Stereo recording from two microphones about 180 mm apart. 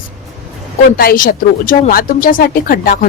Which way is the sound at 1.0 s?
55° left (ahead or behind).